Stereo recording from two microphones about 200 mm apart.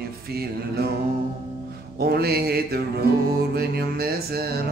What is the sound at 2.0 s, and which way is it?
Mantra, 50° right (ahead or behind).